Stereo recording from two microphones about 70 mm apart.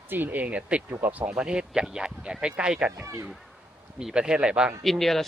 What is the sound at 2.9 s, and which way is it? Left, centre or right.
Speech, right.